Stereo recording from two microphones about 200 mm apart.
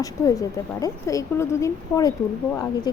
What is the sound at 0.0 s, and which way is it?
Speech, 15° left (ahead or behind).